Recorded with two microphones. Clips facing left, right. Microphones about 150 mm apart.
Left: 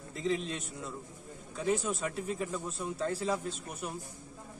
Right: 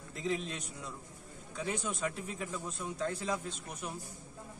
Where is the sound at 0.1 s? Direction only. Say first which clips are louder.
Left 3 dB; centre (ahead or behind).